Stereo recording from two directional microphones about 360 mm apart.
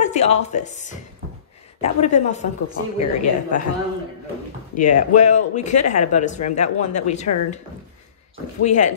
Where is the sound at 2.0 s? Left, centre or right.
Centre.